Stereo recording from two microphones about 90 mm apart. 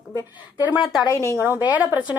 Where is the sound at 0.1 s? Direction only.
50° left (ahead or behind).